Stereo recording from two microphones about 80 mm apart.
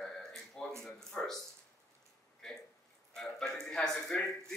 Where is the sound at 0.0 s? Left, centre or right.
Centre.